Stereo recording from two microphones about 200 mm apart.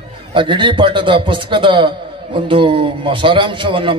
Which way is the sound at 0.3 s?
25° right (ahead or behind).